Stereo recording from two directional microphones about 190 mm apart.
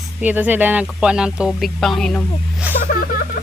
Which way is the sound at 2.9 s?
50° left (ahead or behind).